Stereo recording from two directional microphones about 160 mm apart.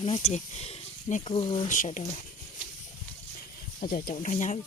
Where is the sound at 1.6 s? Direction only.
55° left (ahead or behind).